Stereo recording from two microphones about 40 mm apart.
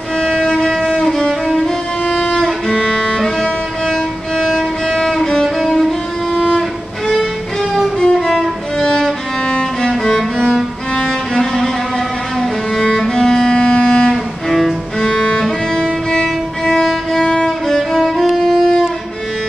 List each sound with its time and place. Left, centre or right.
0.2 s violin: centre
0.7 s music: centre
2.8 s violin: centre
3.4 s music: centre
8.0 s music: centre
12.8 s music: centre
14.1 s cello: centre
15.0 s music: centre
16.1 s violin: centre
17.9 s music: centre